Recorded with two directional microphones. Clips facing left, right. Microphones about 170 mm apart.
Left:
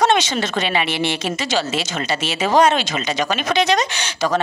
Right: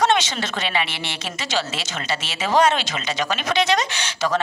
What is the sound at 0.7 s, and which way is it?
Speech, 15° left (ahead or behind).